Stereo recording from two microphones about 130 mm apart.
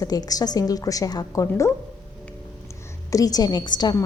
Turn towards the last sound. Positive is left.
turn(degrees=30)  # may be behind; listen again after turning